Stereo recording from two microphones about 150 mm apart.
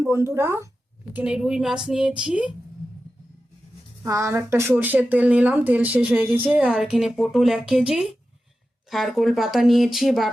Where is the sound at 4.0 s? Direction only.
20° right (ahead or behind).